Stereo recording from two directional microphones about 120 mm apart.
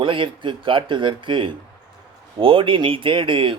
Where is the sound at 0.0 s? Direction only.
45° right (ahead or behind).